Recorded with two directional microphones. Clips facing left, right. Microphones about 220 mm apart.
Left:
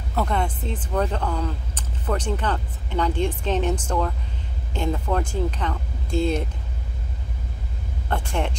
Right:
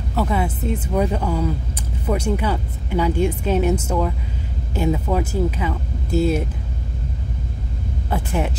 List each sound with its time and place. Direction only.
0.1 s speech: 5° right (ahead or behind)
8.1 s speech: 5° right (ahead or behind)